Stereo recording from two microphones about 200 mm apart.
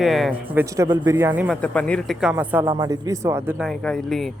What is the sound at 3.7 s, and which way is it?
Speech, centre (ahead or behind).